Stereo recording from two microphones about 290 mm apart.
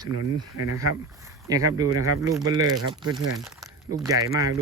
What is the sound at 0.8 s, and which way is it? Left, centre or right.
Speech, centre.